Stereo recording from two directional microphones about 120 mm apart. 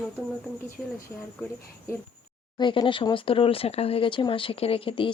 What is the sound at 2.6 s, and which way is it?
A woman's voice, 40° left (ahead or behind).